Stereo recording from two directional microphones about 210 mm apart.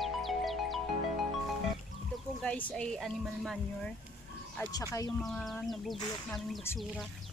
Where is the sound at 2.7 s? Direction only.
5° left (ahead or behind).